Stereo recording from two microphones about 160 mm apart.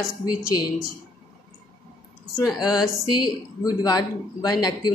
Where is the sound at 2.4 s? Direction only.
25° left (ahead or behind).